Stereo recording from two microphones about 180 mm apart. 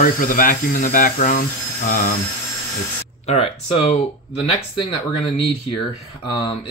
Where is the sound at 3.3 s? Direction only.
35° left (ahead or behind).